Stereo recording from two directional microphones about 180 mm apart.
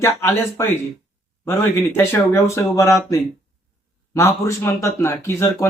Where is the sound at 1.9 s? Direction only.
15° left (ahead or behind).